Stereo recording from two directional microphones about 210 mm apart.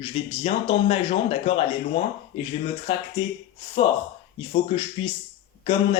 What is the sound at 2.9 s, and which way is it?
Speech, 30° left (ahead or behind).